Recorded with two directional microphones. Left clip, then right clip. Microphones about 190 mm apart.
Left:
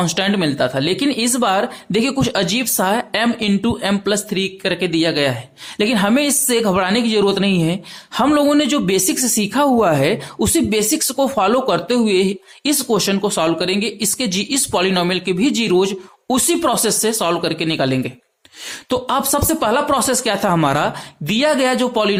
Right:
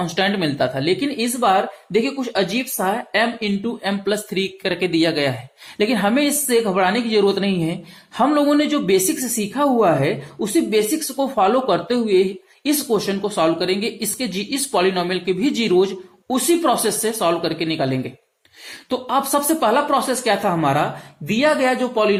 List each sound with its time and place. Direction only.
0.0 s speech: 30° left (ahead or behind)